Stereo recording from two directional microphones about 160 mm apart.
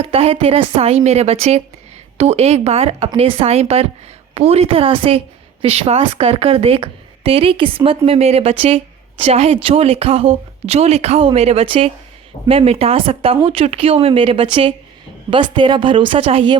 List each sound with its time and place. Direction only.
0.0 s a woman's voice: 40° right (ahead or behind)